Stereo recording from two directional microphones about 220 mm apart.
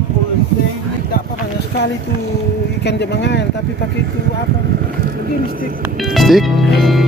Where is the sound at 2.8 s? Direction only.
50° left (ahead or behind).